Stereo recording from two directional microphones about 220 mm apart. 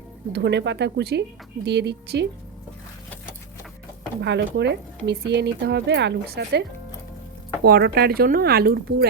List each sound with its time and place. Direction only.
0.3 s speech: 50° right (ahead or behind)
4.2 s speech: 50° right (ahead or behind)